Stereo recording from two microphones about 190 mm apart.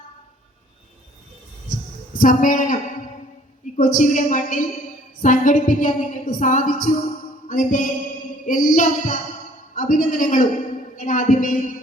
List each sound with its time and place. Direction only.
2.1 s a woman's voice: 45° left (ahead or behind)
3.8 s a woman's voice: 45° left (ahead or behind)
7.4 s music: 45° left (ahead or behind)
8.4 s a woman's voice: 45° left (ahead or behind)